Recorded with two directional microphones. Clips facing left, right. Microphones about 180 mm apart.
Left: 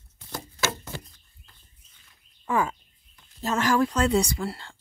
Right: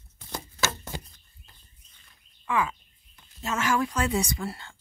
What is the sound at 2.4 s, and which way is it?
Speech, 45° left (ahead or behind).